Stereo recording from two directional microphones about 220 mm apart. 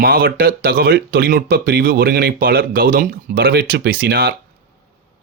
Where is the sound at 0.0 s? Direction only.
45° right (ahead or behind).